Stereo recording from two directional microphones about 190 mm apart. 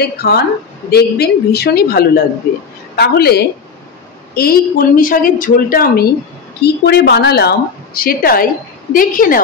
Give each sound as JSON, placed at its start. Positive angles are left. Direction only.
{"t": 0.0, "sound": "a woman's voice", "side_deg": 55}
{"t": 6.6, "sound": "a woman's voice", "side_deg": 60}